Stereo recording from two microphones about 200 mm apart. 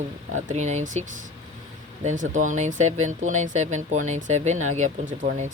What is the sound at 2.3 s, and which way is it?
Speech, 40° right (ahead or behind).